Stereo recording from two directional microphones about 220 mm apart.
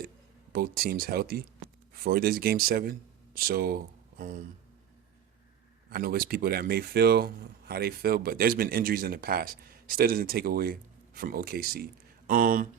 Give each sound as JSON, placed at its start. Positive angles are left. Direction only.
{"t": 0.5, "sound": "speech", "side_deg": -45}
{"t": 5.9, "sound": "speech", "side_deg": -45}